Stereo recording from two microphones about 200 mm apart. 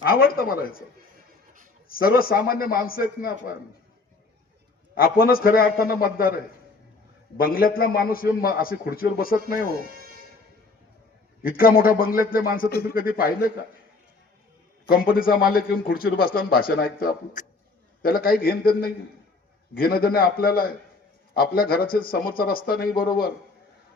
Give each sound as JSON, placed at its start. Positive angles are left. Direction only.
{"t": 0.0, "sound": "a man's voice", "side_deg": 45}
{"t": 1.9, "sound": "a man's voice", "side_deg": 45}
{"t": 4.9, "sound": "a man's voice", "side_deg": 45}
{"t": 7.3, "sound": "a man's voice", "side_deg": 45}
{"t": 11.4, "sound": "a man's voice", "side_deg": 45}
{"t": 14.8, "sound": "a man's voice", "side_deg": 45}